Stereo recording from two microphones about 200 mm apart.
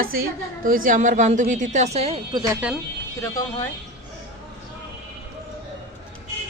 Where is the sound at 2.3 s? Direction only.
15° right (ahead or behind).